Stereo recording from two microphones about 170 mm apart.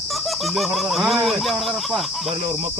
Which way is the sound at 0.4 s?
Centre (ahead or behind).